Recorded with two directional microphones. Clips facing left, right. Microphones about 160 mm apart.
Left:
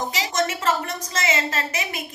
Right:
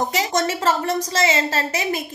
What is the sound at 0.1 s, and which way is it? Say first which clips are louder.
A woman's voice: right 3 dB; 45° right (ahead or behind).